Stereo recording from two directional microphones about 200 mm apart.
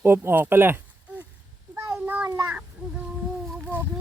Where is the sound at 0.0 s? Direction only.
10° right (ahead or behind).